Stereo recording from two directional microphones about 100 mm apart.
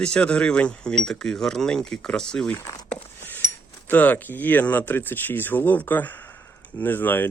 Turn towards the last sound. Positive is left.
turn(degrees=20)  # may be behind; listen again after turning